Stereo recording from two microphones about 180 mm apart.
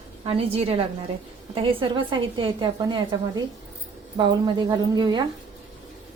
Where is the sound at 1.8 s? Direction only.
25° right (ahead or behind).